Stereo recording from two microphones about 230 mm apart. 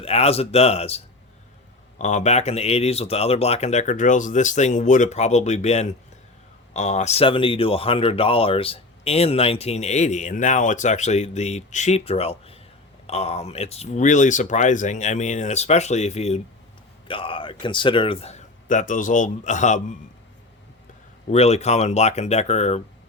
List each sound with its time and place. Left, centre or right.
0.0 s speech: left
21.2 s speech: left